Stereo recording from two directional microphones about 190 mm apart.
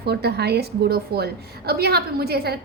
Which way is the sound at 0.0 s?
60° right (ahead or behind).